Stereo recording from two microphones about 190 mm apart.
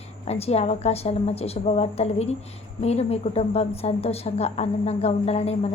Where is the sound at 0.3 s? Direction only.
35° left (ahead or behind).